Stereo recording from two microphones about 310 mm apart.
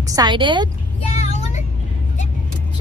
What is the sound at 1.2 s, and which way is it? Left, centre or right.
Vehicle, left.